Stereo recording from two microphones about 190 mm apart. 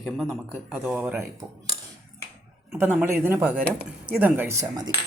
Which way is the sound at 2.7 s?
10° right (ahead or behind).